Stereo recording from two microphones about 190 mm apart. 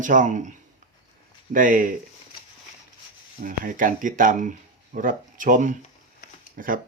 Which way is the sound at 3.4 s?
45° right (ahead or behind).